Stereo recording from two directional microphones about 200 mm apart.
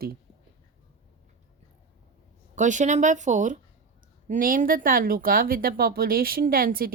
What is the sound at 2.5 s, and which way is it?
Speech, 40° right (ahead or behind).